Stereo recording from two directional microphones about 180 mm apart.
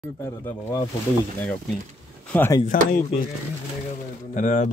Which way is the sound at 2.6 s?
45° left (ahead or behind).